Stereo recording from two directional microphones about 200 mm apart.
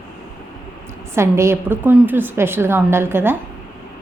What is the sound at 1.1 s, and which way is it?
A woman's voice, 15° right (ahead or behind).